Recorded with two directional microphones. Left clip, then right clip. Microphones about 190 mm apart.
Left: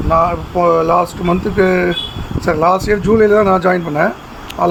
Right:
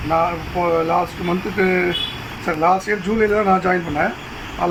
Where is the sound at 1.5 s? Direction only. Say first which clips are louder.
Left 4 dB; 75° left (ahead or behind).